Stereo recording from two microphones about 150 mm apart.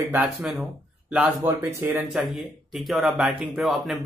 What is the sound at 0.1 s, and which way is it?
Speech, 5° right (ahead or behind).